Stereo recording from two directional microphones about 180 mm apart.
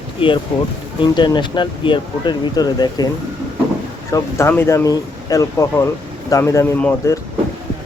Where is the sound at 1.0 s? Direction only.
25° left (ahead or behind).